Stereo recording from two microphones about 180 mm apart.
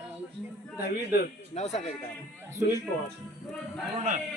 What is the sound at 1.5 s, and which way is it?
Speech, 40° left (ahead or behind).